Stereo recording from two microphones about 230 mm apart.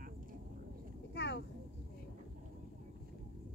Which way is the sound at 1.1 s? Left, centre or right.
Left.